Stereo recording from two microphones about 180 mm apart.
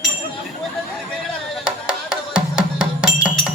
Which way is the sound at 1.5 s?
5° right (ahead or behind).